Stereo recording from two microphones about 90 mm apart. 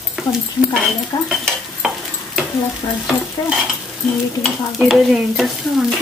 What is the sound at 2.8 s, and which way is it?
Stir, 55° left (ahead or behind).